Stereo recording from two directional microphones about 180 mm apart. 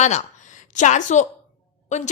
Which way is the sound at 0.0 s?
40° left (ahead or behind).